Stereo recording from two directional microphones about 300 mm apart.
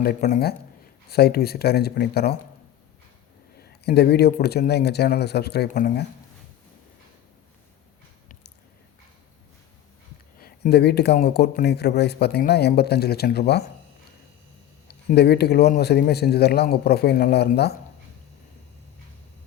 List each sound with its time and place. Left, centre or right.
0.0 s speech: left
3.6 s speech: left
10.4 s speech: left
14.8 s speech: left